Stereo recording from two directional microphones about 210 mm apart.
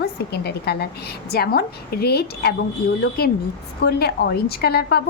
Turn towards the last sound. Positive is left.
turn(degrees=50)  # may be behind; listen again after turning